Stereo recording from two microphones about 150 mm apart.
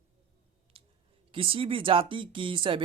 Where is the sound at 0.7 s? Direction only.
40° right (ahead or behind).